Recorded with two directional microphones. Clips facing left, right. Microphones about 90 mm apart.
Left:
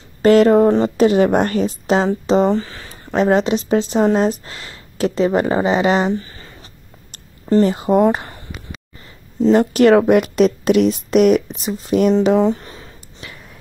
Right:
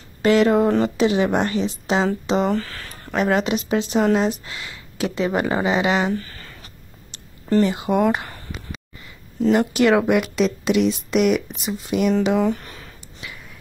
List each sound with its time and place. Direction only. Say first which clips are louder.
0.2 s a sound: left 5 dB; 40° left (ahead or behind)
0.7 s speech: left 4 dB; 30° left (ahead or behind)
0.9 s speech: left 5 dB; 45° left (ahead or behind)
2.5 s speech: left 3 dB; 20° left (ahead or behind); by 6.0 s 35° left (ahead or behind)
6.1 s a sound: left 3 dB; 25° left (ahead or behind)
7.6 s speech: left 6 dB; 35° left (ahead or behind)